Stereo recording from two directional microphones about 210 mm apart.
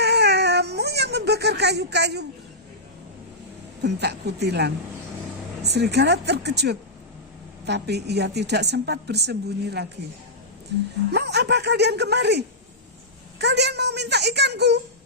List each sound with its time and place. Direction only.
0.0 s baby cry: 50° right (ahead or behind)
3.8 s a woman's voice: 55° right (ahead or behind)
11.1 s a woman's voice: 50° right (ahead or behind)